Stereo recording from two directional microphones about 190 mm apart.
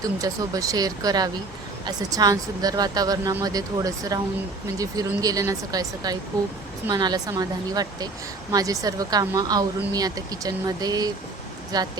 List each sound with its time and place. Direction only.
0.0 s speech: 20° right (ahead or behind)